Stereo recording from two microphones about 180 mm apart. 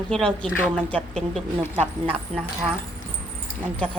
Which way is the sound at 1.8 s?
35° right (ahead or behind).